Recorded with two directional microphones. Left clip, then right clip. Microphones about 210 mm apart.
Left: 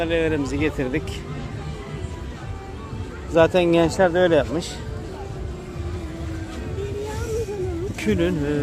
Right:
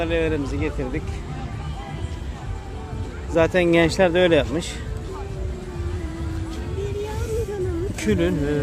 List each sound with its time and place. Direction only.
0.0 s speech: 5° left (ahead or behind)
0.4 s speech: 20° left (ahead or behind)
3.3 s speech: 5° left (ahead or behind)
3.9 s speech: 15° right (ahead or behind)
7.9 s speech: centre (ahead or behind)